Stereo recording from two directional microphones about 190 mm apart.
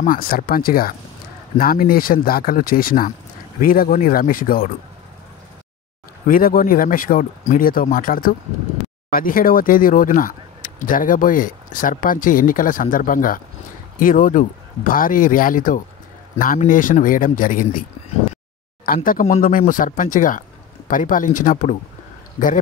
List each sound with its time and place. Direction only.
0.0 s speech: 50° left (ahead or behind)
6.2 s speech: 50° left (ahead or behind)
18.9 s speech: 45° left (ahead or behind)